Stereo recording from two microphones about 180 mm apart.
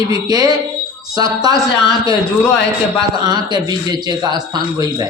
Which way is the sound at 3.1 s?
25° right (ahead or behind).